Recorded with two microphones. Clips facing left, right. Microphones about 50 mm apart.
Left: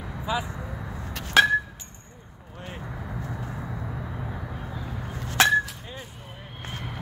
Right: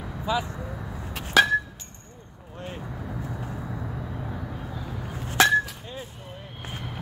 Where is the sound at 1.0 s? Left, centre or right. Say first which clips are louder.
Even; centre.